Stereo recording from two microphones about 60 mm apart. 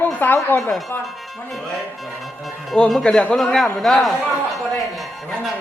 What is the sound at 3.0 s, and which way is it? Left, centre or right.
Speech, centre.